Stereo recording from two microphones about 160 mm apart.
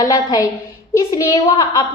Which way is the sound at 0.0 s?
25° left (ahead or behind).